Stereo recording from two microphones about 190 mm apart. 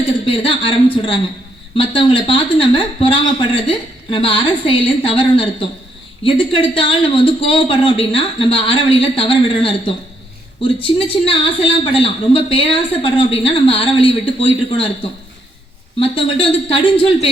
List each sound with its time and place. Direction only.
0.3 s a woman's voice: 25° left (ahead or behind)
16.0 s a woman's voice: 30° left (ahead or behind)